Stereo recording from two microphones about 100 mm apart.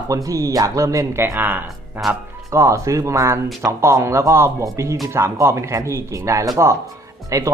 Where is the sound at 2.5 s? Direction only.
30° right (ahead or behind).